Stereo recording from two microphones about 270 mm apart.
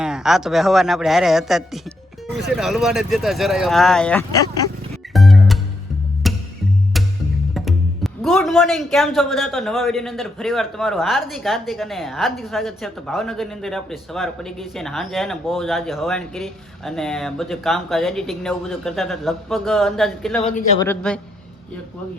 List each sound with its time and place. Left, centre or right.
0.0 s speech: centre
5.1 s music: centre
7.5 s speech: centre
20.4 s speech: left
20.7 s speech: centre